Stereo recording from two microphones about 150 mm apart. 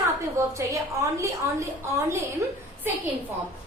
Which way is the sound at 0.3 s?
20° right (ahead or behind).